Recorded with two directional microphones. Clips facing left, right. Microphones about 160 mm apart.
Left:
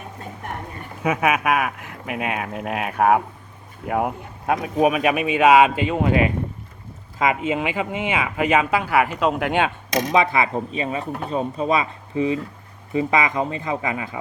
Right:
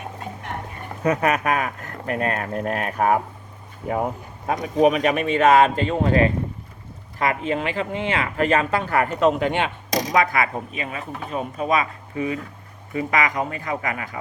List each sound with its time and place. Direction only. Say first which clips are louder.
1.0 s speech: even; 5° left (ahead or behind)
10.1 s speech: left 2 dB; 25° left (ahead or behind)